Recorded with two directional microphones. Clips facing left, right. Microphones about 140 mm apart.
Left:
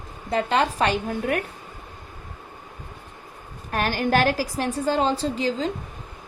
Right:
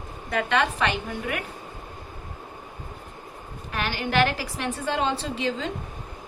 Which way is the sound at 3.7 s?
45° left (ahead or behind).